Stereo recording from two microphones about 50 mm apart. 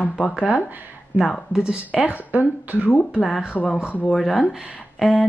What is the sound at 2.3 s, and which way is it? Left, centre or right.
Speech, right.